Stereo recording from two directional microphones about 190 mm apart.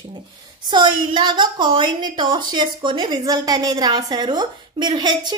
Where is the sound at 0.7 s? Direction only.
25° right (ahead or behind).